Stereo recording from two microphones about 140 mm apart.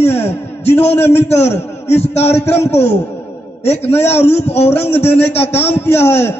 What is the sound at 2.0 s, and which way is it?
Speech, 50° left (ahead or behind).